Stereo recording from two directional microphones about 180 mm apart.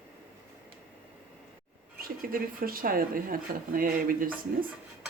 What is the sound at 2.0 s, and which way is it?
Speech, 55° right (ahead or behind).